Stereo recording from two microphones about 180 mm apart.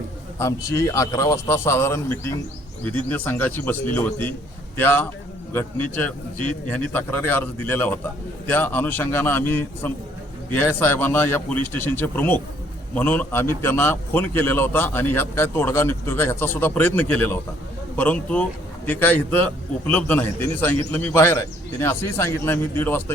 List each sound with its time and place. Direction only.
0.3 s a man's voice: 15° left (ahead or behind)